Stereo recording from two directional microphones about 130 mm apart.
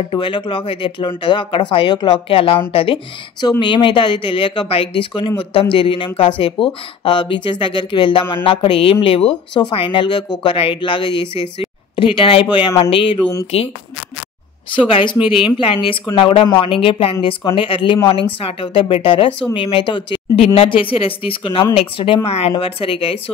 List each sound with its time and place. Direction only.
0.1 s a woman's voice: 40° left (ahead or behind)
3.3 s a woman's voice: 35° left (ahead or behind)
14.9 s a woman's voice: 45° left (ahead or behind)